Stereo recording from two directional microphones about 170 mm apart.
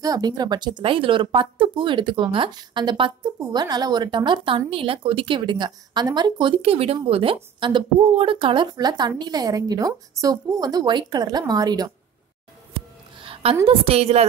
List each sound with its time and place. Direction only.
0.0 s a woman's voice: 20° right (ahead or behind)
13.2 s a sound: 30° right (ahead or behind)
13.7 s a woman's voice: 35° right (ahead or behind)